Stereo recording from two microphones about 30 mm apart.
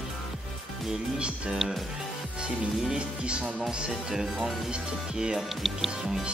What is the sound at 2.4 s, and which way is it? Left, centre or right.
Music, right.